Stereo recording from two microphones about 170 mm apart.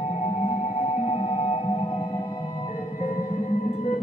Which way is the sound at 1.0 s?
35° left (ahead or behind).